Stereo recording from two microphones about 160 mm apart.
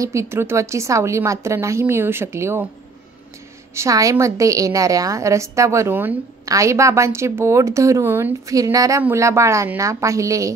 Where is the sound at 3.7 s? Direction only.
20° right (ahead or behind).